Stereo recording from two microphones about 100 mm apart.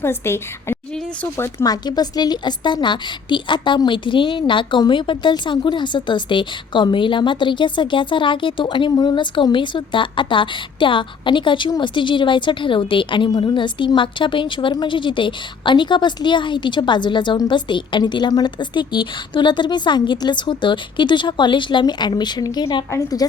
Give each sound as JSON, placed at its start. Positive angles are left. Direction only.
{"t": 0.0, "sound": "a woman's voice", "side_deg": 25}